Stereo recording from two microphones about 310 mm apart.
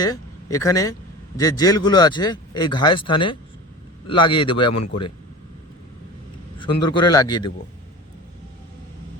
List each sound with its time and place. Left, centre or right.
0.0 s speech: centre
6.6 s speech: centre